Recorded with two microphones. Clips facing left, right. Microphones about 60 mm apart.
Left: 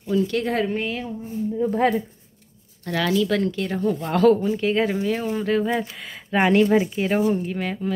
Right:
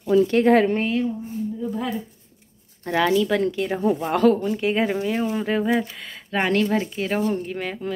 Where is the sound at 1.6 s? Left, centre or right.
Left.